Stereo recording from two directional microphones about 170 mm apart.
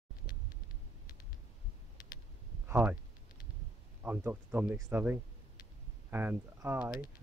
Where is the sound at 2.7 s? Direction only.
10° right (ahead or behind).